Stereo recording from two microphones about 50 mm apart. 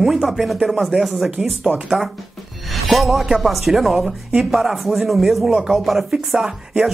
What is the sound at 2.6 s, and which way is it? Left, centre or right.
Speech, centre.